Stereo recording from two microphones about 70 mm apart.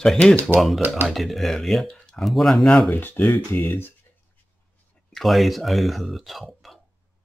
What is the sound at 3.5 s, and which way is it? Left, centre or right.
Speech, left.